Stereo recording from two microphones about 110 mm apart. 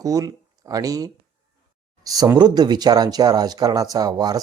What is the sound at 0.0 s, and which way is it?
Speech, 30° right (ahead or behind).